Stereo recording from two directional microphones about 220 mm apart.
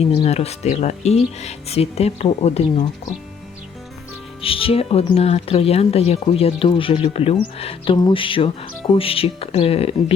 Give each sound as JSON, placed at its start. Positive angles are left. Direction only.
{"t": 0.0, "sound": "speech", "side_deg": 25}
{"t": 4.4, "sound": "speech", "side_deg": 25}